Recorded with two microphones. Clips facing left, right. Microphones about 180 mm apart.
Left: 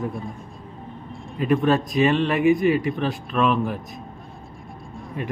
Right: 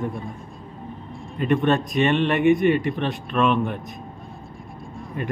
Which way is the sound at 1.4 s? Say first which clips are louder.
Left 1 dB; centre (ahead or behind).